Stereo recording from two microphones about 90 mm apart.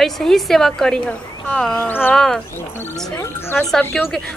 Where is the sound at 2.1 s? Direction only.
5° left (ahead or behind).